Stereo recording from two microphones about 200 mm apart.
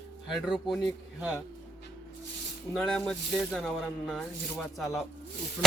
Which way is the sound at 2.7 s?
Centre (ahead or behind).